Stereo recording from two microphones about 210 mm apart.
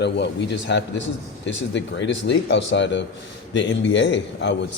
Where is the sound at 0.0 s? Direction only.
55° left (ahead or behind).